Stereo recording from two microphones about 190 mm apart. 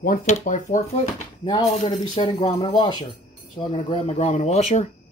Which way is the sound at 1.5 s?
20° left (ahead or behind).